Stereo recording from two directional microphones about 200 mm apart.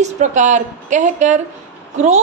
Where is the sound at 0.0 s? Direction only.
35° right (ahead or behind).